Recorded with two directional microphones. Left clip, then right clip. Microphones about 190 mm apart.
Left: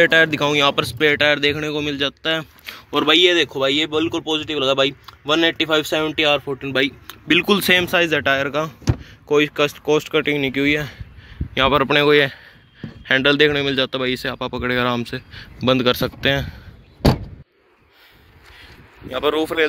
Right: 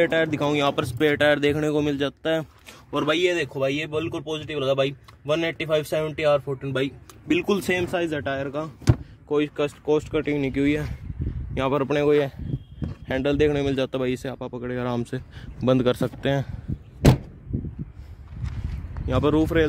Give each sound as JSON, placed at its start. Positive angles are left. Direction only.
{"t": 0.0, "sound": "speech", "side_deg": -5}
{"t": 2.7, "sound": "speech", "side_deg": 0}
{"t": 15.0, "sound": "speech", "side_deg": -15}
{"t": 18.4, "sound": "a sound", "side_deg": 5}